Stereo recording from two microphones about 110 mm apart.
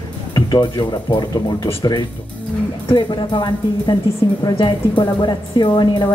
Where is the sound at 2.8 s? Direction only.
45° left (ahead or behind).